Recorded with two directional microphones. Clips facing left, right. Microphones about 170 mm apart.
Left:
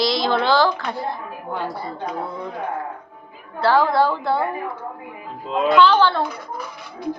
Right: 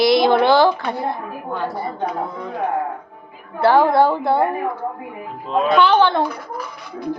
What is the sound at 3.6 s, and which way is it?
Speech, 20° right (ahead or behind).